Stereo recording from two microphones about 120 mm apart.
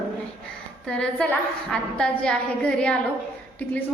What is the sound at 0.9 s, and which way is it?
A woman's voice, 10° left (ahead or behind).